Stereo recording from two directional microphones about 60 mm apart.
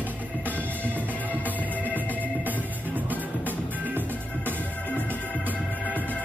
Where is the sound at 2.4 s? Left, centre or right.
Right.